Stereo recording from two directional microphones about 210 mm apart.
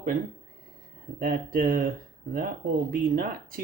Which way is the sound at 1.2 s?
40° right (ahead or behind).